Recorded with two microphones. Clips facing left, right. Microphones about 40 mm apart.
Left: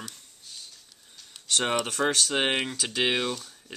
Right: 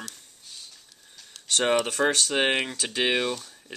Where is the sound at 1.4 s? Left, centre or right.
Centre.